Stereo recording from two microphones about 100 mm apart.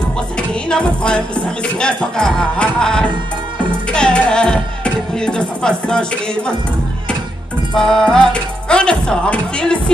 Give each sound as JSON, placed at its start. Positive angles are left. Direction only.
{"t": 0.7, "sound": "speech", "side_deg": 10}
{"t": 7.7, "sound": "speech", "side_deg": 5}